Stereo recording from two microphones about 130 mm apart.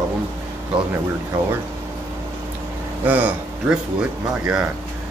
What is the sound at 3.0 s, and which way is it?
Speech, 10° right (ahead or behind).